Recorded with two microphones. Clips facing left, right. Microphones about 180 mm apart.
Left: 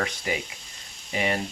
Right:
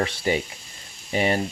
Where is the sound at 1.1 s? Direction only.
35° right (ahead or behind).